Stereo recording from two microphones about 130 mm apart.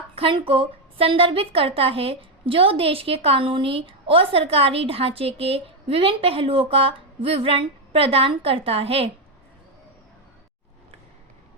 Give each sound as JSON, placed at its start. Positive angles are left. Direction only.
{"t": 0.2, "sound": "a woman's voice", "side_deg": -40}